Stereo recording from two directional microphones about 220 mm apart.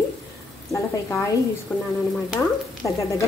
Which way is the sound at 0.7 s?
15° left (ahead or behind).